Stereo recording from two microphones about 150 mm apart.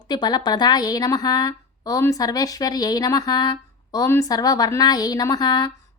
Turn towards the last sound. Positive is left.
turn(degrees=25)  # may be behind; listen again after turning